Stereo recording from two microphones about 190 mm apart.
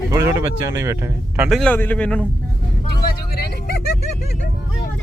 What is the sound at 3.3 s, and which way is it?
Vehicle, 55° left (ahead or behind).